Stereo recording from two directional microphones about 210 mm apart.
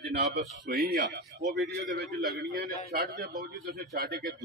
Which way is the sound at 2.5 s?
45° right (ahead or behind).